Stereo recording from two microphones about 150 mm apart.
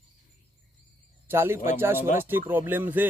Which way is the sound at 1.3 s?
15° right (ahead or behind).